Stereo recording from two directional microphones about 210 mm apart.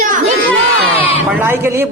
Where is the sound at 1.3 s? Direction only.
10° right (ahead or behind).